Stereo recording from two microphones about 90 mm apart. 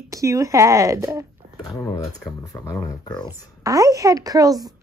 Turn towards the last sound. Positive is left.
turn(degrees=-40)  # may be behind; listen again after turning